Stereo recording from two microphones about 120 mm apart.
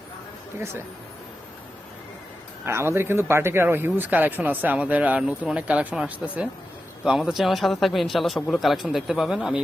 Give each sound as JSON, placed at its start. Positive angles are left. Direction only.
{"t": 2.6, "sound": "speech", "side_deg": -20}